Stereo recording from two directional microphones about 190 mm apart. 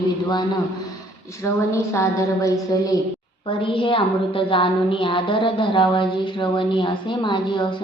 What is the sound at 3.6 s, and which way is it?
A woman's voice, 25° left (ahead or behind).